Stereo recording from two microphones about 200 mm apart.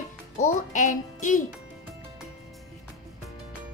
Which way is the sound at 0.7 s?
40° left (ahead or behind).